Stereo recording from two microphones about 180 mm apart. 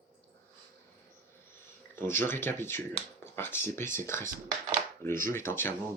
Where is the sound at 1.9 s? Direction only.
10° left (ahead or behind).